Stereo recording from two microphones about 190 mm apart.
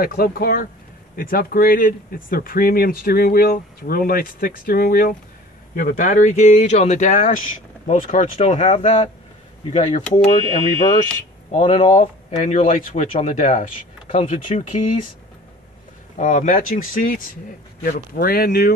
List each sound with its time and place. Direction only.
0.0 s speech: 50° left (ahead or behind)
11.5 s speech: 30° left (ahead or behind)
16.2 s speech: 40° left (ahead or behind)